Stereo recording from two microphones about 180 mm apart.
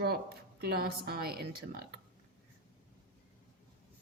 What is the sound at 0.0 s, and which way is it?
A woman's voice, 60° right (ahead or behind).